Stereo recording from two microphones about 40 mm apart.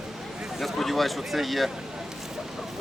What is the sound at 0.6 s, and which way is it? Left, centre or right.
Speech, centre.